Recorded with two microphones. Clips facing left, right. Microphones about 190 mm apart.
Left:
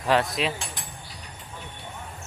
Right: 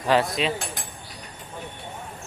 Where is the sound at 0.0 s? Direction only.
Centre (ahead or behind).